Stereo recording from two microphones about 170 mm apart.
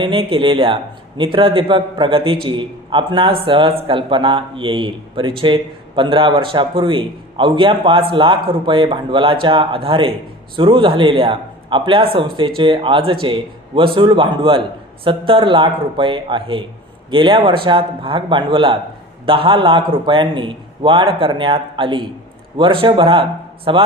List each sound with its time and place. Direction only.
0.0 s a man's voice: 30° right (ahead or behind)